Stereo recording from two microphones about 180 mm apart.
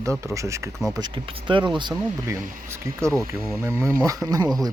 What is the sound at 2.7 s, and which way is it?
Speech, 15° right (ahead or behind).